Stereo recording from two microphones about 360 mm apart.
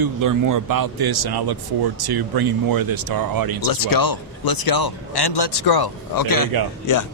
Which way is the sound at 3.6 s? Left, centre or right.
Left.